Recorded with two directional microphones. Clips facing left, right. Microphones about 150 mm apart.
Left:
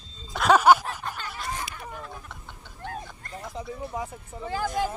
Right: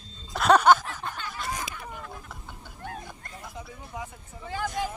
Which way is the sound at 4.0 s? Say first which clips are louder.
Left 5 dB; 35° left (ahead or behind).